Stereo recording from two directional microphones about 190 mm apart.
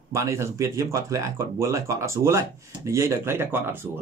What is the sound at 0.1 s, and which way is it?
Speech, 15° right (ahead or behind).